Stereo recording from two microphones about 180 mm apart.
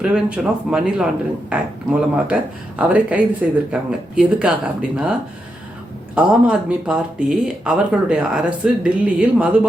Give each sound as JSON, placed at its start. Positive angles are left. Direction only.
{"t": 0.0, "sound": "speech", "side_deg": -5}
{"t": 6.1, "sound": "speech", "side_deg": -5}